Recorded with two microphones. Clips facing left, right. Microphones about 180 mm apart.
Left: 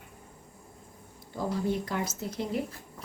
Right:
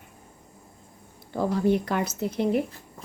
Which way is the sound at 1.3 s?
65° right (ahead or behind).